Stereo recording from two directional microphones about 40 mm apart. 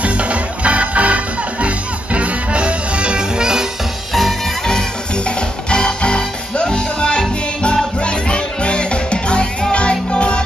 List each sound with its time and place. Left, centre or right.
0.0 s music: right
4.1 s music: centre
4.6 s music: centre